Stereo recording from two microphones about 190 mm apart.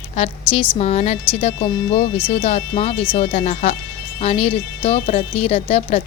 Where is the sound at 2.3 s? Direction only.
35° left (ahead or behind).